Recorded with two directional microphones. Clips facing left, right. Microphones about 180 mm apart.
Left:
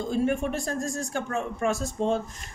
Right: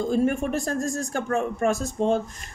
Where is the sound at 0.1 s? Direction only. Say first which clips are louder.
Right 1 dB; 45° right (ahead or behind).